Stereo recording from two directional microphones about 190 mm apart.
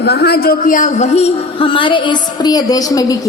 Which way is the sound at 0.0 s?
55° left (ahead or behind).